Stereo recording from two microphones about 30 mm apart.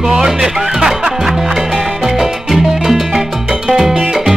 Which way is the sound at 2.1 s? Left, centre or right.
Centre.